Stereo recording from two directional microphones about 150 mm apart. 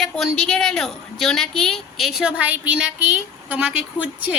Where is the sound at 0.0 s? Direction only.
Centre (ahead or behind).